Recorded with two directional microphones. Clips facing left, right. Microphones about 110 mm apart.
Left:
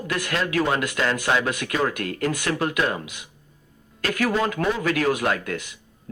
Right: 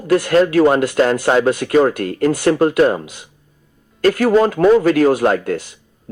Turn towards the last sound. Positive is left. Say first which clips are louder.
# right 8 dB
turn(degrees=-35)  # may be behind; listen again after turning